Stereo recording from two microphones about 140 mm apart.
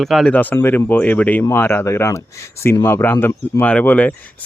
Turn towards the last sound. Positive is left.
turn(degrees=10)  # may be behind; listen again after turning